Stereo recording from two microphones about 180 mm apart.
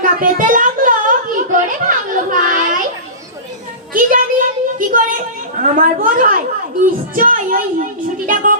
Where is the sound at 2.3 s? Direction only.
45° right (ahead or behind).